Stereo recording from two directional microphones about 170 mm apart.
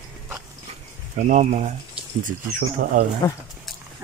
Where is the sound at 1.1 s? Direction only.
45° right (ahead or behind).